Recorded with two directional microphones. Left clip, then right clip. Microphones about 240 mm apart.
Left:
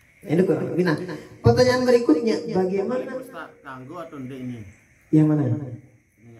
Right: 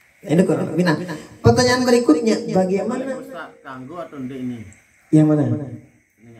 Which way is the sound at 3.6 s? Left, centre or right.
Left.